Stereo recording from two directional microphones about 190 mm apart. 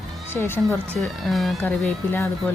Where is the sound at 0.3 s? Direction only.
10° left (ahead or behind).